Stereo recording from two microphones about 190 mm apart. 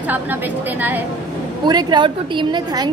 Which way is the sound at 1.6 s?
20° right (ahead or behind).